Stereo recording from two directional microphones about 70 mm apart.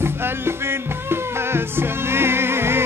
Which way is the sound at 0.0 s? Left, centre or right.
Right.